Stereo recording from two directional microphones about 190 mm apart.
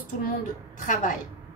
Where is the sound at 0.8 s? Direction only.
45° left (ahead or behind).